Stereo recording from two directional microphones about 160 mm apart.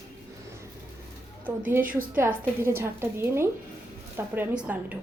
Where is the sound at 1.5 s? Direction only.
15° right (ahead or behind).